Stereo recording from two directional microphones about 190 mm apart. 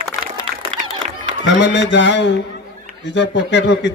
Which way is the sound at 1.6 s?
70° left (ahead or behind).